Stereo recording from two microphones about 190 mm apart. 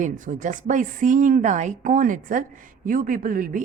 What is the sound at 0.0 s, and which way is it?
A woman's voice, 40° right (ahead or behind).